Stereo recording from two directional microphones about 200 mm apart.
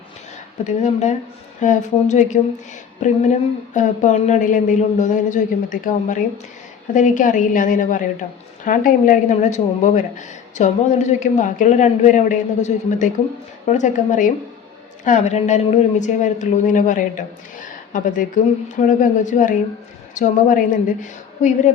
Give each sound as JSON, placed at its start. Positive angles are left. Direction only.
{"t": 0.6, "sound": "a woman's voice", "side_deg": 35}